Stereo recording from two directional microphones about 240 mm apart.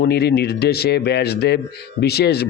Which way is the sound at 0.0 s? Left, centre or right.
Left.